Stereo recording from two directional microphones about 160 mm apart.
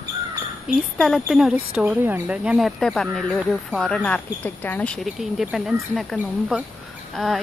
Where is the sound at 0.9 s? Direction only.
Centre (ahead or behind).